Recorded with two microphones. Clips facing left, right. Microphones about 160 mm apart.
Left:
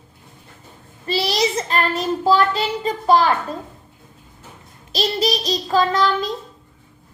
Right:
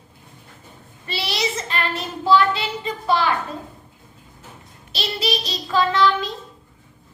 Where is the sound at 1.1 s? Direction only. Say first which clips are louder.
Left 6 dB; 40° left (ahead or behind).